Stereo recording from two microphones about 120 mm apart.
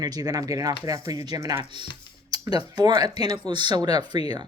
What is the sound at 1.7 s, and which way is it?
Speech, 40° right (ahead or behind).